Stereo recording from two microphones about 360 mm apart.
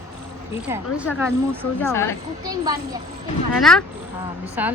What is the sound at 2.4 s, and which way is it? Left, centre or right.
Speech, centre.